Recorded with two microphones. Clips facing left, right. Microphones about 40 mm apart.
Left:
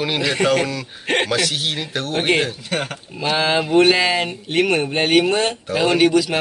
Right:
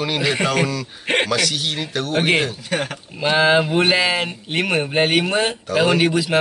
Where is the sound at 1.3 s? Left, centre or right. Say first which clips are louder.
Even; centre.